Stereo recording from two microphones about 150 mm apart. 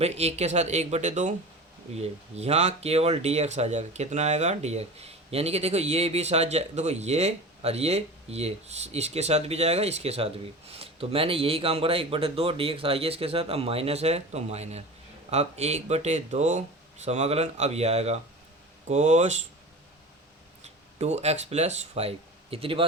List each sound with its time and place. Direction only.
0.0 s speech: 45° right (ahead or behind)
21.0 s speech: 45° right (ahead or behind)